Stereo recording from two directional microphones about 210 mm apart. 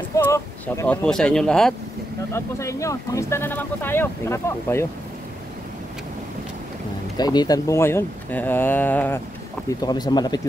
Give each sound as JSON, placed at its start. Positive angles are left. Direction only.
{"t": 0.1, "sound": "speech", "side_deg": 15}
{"t": 2.3, "sound": "speech", "side_deg": 15}
{"t": 7.2, "sound": "speech", "side_deg": 20}